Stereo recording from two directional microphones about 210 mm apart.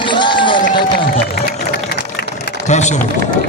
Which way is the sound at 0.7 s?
25° left (ahead or behind).